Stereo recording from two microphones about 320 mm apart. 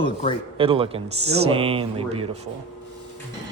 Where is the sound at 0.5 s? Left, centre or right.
Centre.